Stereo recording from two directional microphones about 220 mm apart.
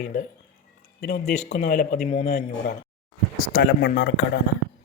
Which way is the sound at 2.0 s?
30° left (ahead or behind).